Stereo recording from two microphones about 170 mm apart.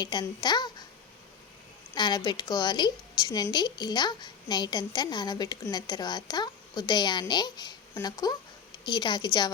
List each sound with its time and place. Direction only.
0.0 s speech: 25° left (ahead or behind)
2.0 s a woman's voice: 25° left (ahead or behind)